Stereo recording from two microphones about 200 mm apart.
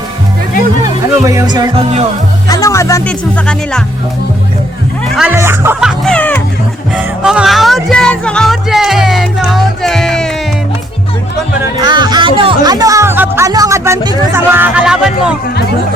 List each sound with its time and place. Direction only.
1.2 s music: 15° right (ahead or behind)
2.5 s speech: 15° left (ahead or behind)
3.1 s speech: 5° left (ahead or behind)
5.1 s speech: 10° right (ahead or behind)
6.1 s music: 10° left (ahead or behind)
6.9 s music: 5° right (ahead or behind)
11.8 s music: 20° right (ahead or behind); by 15.4 s 5° right (ahead or behind)